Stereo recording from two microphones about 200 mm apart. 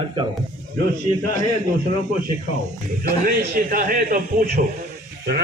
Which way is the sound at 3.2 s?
45° right (ahead or behind).